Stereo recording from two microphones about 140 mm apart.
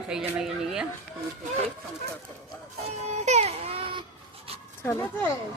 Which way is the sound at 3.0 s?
55° right (ahead or behind).